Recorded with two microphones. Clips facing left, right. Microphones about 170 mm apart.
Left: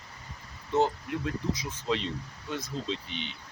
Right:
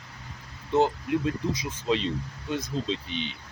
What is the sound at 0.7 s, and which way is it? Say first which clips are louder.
Speech: right 4 dB; 15° right (ahead or behind).